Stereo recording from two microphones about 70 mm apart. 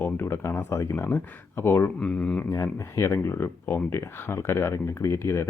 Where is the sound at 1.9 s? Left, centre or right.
Centre.